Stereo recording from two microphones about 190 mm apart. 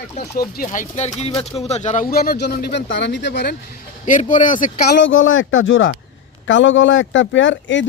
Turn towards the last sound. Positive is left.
turn(degrees=75)  # may be behind; listen again after turning